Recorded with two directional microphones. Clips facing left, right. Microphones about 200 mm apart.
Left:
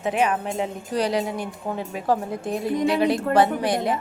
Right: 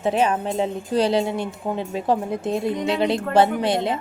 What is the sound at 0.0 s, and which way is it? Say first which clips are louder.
Speech: right 2 dB; 30° right (ahead or behind).